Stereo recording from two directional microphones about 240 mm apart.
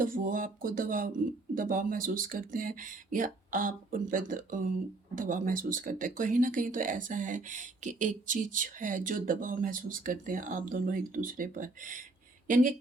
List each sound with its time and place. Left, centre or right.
0.0 s speech: right